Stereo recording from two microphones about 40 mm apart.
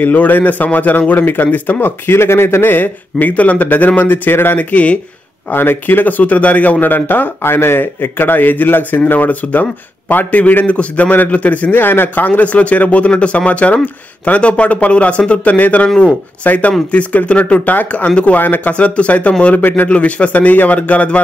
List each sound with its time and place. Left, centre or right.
0.0 s a man's voice: left
4.6 s speech: left
5.5 s a man's voice: left
10.7 s speech: left
11.7 s speech: left
12.3 s speech: left
15.4 s speech: left
18.4 s a man's voice: left
18.7 s speech: left